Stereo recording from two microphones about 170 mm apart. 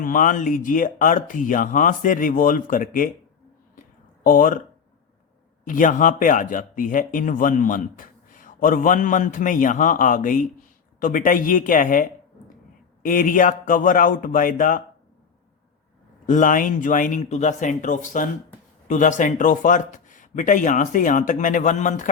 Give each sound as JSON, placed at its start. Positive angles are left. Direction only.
{"t": 0.0, "sound": "speech", "side_deg": 55}
{"t": 4.2, "sound": "speech", "side_deg": 50}
{"t": 5.6, "sound": "speech", "side_deg": 50}
{"t": 16.2, "sound": "speech", "side_deg": 50}